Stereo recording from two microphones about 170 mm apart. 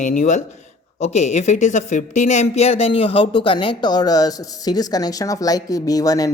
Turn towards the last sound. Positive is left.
turn(degrees=20)  # may be behind; listen again after turning